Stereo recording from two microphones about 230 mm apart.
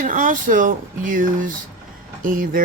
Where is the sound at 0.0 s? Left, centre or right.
Right.